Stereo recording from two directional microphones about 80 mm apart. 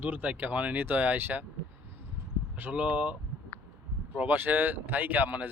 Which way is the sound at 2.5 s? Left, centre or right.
Centre.